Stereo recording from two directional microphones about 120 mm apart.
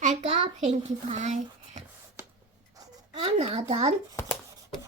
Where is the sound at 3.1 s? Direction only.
50° right (ahead or behind).